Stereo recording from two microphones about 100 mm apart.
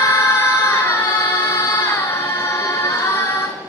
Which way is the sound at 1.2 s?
25° left (ahead or behind).